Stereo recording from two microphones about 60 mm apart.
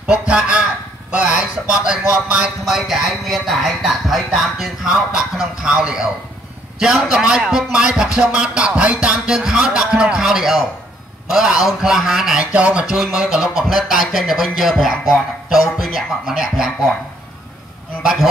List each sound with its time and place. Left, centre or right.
0.3 s speech: centre
1.1 s a sound: centre
2.6 s speech: centre
12.5 s speech: centre